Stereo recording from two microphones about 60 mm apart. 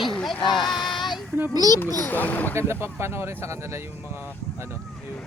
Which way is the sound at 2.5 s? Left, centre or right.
Right.